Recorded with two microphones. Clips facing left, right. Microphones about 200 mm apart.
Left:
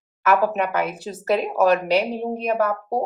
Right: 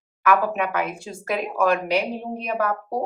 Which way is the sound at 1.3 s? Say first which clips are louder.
Left 4 dB; 40° left (ahead or behind).